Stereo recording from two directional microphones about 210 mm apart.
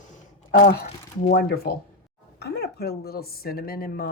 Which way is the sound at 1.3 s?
50° left (ahead or behind).